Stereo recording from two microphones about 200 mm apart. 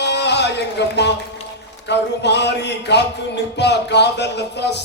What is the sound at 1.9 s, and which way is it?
Speech, 60° left (ahead or behind).